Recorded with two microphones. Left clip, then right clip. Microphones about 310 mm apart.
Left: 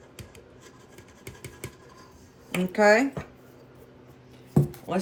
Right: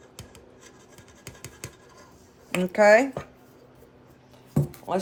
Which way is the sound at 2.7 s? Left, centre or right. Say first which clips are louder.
Right 3 dB; right.